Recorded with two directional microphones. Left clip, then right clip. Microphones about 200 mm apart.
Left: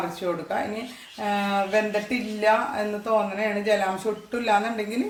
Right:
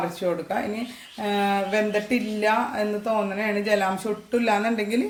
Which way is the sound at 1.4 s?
35° right (ahead or behind).